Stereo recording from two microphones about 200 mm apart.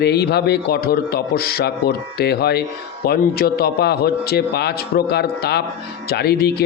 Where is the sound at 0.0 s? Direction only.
55° left (ahead or behind).